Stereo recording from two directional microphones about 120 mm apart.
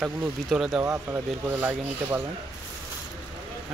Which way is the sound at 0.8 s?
15° right (ahead or behind).